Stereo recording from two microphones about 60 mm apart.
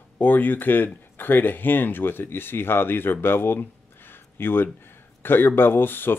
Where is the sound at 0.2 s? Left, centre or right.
Left.